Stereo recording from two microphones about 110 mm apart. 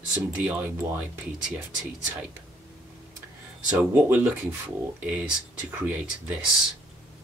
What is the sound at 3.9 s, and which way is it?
Speech, 20° right (ahead or behind).